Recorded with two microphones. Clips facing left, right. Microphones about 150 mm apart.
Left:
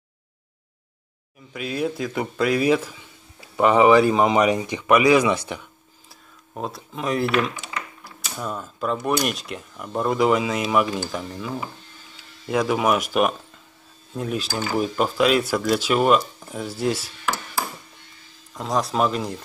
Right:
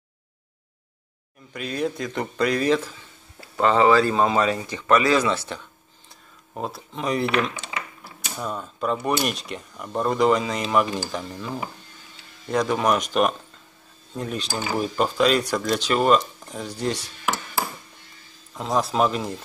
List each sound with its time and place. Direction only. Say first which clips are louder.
1.5 s a man's voice: left 1 dB; 5° left (ahead or behind)
6.5 s a man's voice: even; centre (ahead or behind)
18.5 s speech: even; centre (ahead or behind)